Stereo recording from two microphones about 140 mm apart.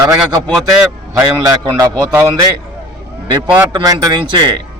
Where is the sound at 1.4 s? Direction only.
30° right (ahead or behind).